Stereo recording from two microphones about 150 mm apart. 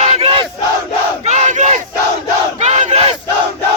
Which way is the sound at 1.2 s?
50° right (ahead or behind).